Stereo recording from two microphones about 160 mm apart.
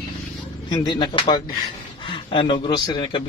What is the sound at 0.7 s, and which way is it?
A man's voice, 30° left (ahead or behind).